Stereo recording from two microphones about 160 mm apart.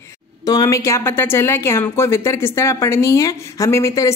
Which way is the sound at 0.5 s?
20° left (ahead or behind).